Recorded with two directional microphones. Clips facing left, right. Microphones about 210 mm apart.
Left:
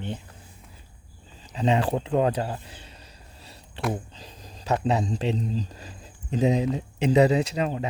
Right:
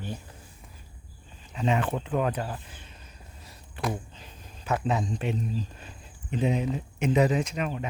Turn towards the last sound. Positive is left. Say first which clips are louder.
# left 4 dB
turn(degrees=35)  # may be behind; listen again after turning